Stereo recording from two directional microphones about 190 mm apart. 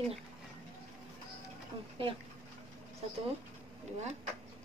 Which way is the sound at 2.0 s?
30° right (ahead or behind).